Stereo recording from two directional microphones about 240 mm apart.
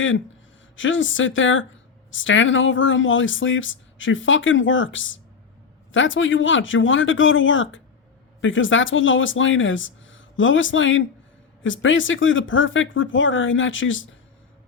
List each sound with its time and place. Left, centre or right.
0.8 s speech: left